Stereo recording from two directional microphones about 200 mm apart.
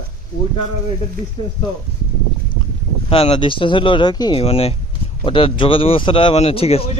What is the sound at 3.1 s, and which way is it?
Speech, 30° left (ahead or behind).